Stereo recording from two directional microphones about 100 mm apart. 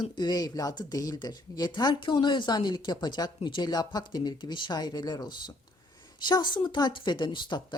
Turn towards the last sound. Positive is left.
turn(degrees=50)  # may be behind; listen again after turning